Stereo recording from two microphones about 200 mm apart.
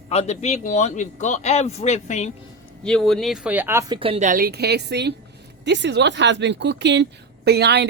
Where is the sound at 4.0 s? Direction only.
30° right (ahead or behind).